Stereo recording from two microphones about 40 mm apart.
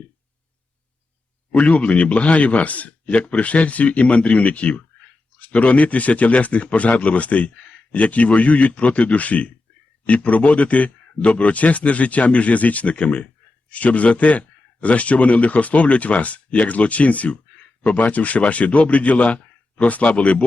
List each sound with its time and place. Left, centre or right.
1.5 s speech: left